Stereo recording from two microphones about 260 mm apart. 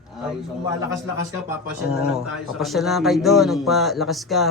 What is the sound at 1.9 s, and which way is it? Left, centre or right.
Speech, centre.